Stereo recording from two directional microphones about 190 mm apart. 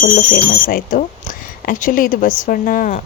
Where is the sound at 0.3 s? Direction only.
45° left (ahead or behind).